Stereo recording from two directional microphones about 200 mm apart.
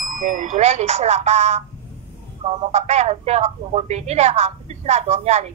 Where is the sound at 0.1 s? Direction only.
40° right (ahead or behind).